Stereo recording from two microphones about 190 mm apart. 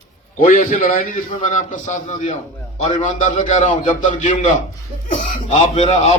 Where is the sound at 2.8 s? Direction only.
25° left (ahead or behind).